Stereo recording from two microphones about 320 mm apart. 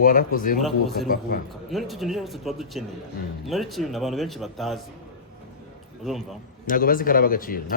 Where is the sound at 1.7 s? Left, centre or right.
Centre.